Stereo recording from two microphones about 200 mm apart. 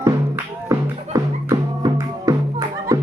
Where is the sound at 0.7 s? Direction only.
15° right (ahead or behind).